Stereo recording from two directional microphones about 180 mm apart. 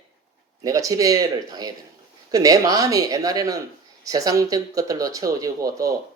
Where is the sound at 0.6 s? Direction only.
20° right (ahead or behind).